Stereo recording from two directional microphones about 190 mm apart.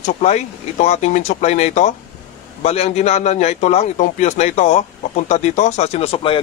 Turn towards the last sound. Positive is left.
turn(degrees=30)  # may be behind; listen again after turning